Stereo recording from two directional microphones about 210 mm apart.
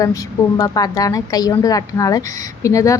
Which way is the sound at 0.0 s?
15° left (ahead or behind).